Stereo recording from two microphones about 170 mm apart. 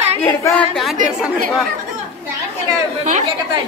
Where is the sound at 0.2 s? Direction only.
15° left (ahead or behind).